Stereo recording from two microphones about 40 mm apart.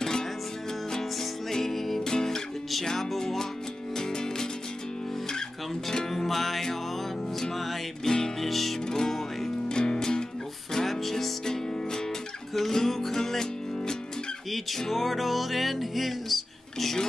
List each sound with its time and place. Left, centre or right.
1.5 s music: centre
5.9 s music: centre
8.0 s music: centre
10.7 s music: centre